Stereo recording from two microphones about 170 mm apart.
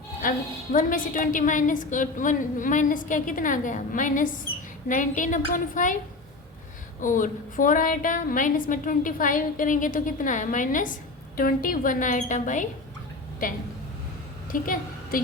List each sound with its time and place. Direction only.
0.2 s a woman's voice: 55° left (ahead or behind)
7.0 s a woman's voice: 50° left (ahead or behind)
14.6 s a woman's voice: 55° left (ahead or behind)